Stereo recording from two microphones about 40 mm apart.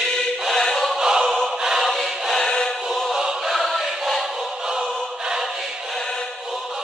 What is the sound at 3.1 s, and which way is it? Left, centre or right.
Choir, centre.